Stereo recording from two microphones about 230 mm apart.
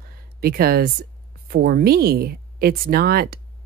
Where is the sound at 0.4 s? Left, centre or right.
Right.